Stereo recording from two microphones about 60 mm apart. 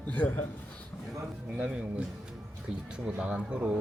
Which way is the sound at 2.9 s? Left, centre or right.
Centre.